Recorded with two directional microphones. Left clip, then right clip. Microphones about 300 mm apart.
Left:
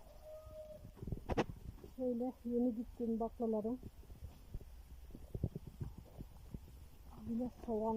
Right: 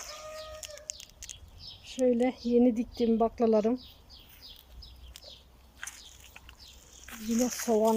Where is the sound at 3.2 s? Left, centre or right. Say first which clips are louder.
Right 14 dB; right.